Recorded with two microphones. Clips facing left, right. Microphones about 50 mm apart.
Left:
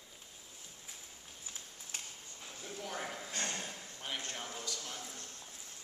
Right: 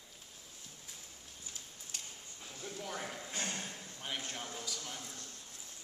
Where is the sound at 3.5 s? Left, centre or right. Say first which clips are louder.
Even; centre.